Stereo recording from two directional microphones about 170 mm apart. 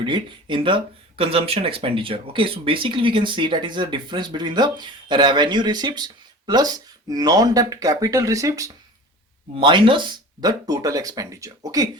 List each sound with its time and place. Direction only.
0.0 s speech: 30° right (ahead or behind)